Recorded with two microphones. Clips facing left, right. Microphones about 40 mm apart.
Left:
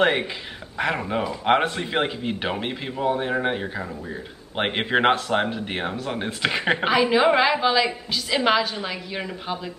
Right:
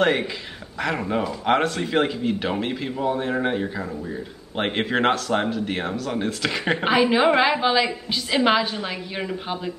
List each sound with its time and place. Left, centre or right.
0.0 s speech: centre
6.8 s a woman's voice: centre